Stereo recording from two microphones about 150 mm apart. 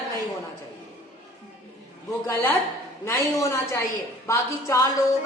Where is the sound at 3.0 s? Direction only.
20° left (ahead or behind).